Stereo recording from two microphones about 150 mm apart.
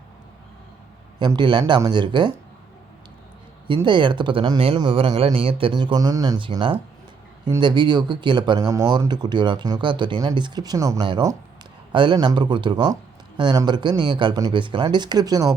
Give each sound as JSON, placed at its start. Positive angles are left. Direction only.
{"t": 1.2, "sound": "speech", "side_deg": -30}
{"t": 3.8, "sound": "speech", "side_deg": -30}